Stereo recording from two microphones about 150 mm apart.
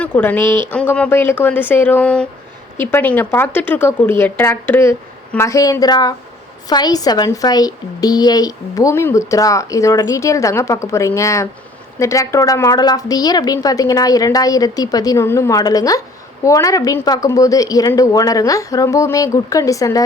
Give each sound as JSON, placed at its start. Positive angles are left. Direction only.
{"t": 0.0, "sound": "a woman's voice", "side_deg": 10}